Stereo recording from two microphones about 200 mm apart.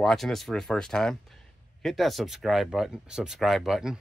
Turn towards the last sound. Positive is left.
turn(degrees=0)  # may be behind; listen again after turning